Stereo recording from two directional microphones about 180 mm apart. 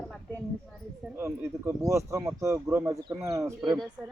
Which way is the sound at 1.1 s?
15° right (ahead or behind).